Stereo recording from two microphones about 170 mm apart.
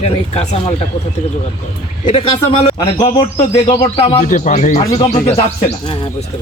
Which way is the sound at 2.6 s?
30° left (ahead or behind).